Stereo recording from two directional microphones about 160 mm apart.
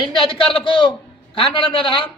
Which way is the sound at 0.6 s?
30° left (ahead or behind).